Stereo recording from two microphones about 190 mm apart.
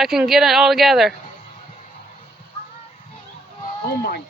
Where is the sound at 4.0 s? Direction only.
55° left (ahead or behind).